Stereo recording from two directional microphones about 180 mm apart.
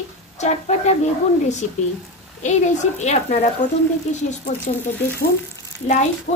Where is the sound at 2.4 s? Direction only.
40° left (ahead or behind).